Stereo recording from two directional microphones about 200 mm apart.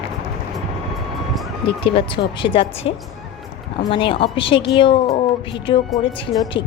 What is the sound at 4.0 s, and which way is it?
Speech, 25° left (ahead or behind).